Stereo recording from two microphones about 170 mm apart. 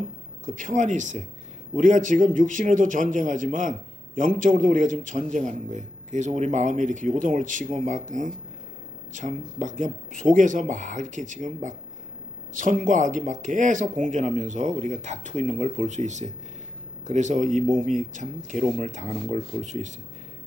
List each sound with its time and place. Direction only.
0.4 s a man's voice: 50° right (ahead or behind)